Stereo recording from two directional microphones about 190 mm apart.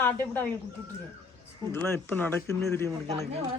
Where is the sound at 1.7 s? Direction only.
10° left (ahead or behind).